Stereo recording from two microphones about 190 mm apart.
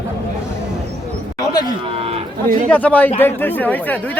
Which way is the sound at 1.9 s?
30° right (ahead or behind).